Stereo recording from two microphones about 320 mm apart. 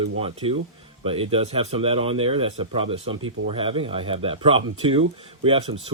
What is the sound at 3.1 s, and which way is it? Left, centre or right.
Speech, right.